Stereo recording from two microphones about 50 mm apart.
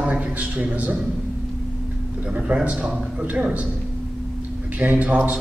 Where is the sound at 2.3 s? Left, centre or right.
Right.